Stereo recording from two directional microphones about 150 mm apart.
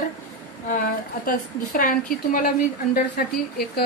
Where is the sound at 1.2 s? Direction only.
75° left (ahead or behind).